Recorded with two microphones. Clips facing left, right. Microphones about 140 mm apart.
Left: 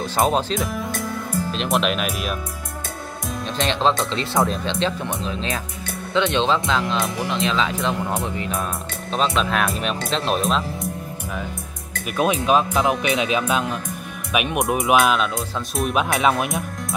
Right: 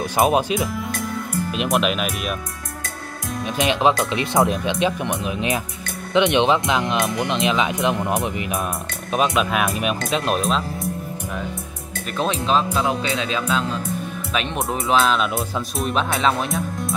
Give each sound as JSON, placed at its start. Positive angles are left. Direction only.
{"t": 0.0, "sound": "speech", "side_deg": -15}
{"t": 3.5, "sound": "speech", "side_deg": -15}
{"t": 9.3, "sound": "speech", "side_deg": -5}
{"t": 12.2, "sound": "music", "side_deg": 10}